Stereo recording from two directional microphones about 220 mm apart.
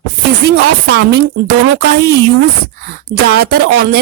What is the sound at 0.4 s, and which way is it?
Speech, 50° right (ahead or behind).